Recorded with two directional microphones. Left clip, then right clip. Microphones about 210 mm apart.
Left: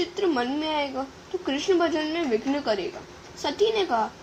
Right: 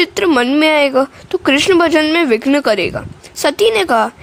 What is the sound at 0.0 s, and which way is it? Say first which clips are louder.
A woman's voice: right 12 dB; 50° right (ahead or behind).